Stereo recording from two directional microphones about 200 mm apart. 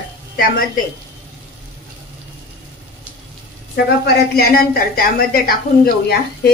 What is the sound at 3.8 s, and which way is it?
A woman's voice, 50° left (ahead or behind).